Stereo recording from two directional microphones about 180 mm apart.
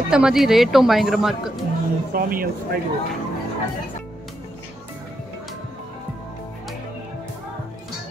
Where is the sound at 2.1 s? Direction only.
55° right (ahead or behind).